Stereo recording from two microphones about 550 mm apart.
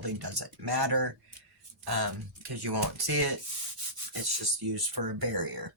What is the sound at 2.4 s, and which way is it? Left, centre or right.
Speech, right.